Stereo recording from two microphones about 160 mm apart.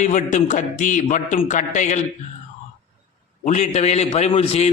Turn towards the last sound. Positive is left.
turn(degrees=40)  # may be behind; listen again after turning